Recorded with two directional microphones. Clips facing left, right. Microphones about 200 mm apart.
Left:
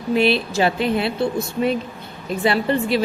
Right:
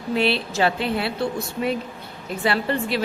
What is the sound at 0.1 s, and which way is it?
A woman's voice, 15° left (ahead or behind).